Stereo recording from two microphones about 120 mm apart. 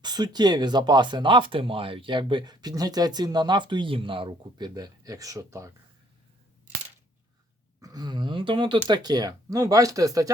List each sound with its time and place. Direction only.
0.0 s speech: 35° right (ahead or behind)
7.8 s speech: 35° right (ahead or behind)